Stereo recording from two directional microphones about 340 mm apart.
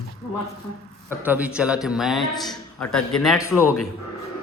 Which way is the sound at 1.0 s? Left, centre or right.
Centre.